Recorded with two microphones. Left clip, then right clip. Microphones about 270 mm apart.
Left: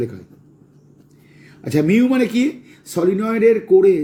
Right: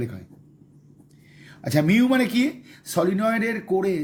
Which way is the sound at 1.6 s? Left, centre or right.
Right.